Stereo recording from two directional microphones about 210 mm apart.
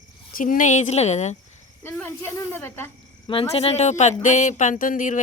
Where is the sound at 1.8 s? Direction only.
10° left (ahead or behind).